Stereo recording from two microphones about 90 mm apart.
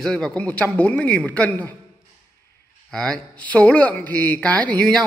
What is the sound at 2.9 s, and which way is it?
Speech, 10° left (ahead or behind).